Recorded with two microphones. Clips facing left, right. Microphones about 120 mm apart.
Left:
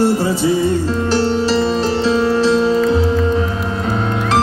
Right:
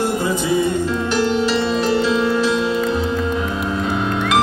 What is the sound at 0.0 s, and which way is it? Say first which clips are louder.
Music: left 5 dB; 35° left (ahead or behind).